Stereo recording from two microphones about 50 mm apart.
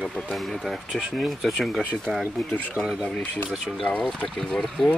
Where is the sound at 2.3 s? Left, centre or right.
Left.